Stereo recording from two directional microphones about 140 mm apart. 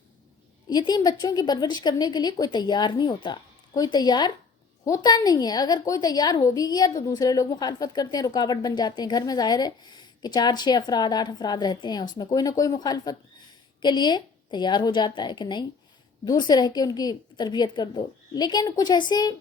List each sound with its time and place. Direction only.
0.7 s a woman's voice: 30° left (ahead or behind)